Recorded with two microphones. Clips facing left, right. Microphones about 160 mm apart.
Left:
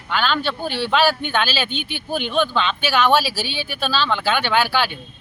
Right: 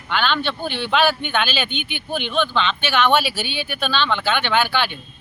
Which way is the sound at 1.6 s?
35° left (ahead or behind).